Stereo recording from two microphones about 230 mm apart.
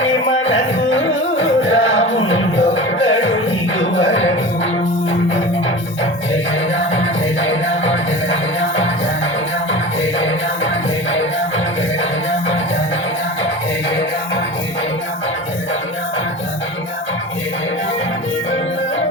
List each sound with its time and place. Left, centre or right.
0.0 s music: left
6.9 s music: left
10.2 s music: left